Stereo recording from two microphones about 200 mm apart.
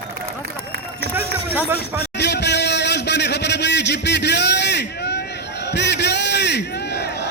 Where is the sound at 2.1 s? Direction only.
60° left (ahead or behind).